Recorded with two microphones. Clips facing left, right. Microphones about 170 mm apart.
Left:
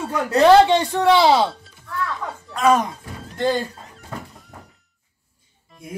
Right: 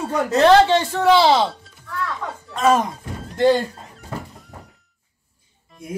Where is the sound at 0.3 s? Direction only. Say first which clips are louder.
Left 1 dB; 10° left (ahead or behind).